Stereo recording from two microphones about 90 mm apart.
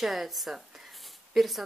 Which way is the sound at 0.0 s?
Centre (ahead or behind).